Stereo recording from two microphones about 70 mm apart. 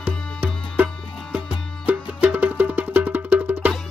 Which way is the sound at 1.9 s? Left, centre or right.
Right.